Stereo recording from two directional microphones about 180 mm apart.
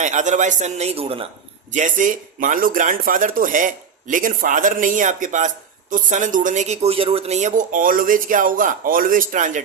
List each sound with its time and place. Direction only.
0.0 s a man's voice: 40° right (ahead or behind)
1.7 s speech: 45° right (ahead or behind)